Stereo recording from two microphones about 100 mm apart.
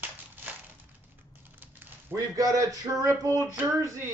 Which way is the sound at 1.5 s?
20° right (ahead or behind).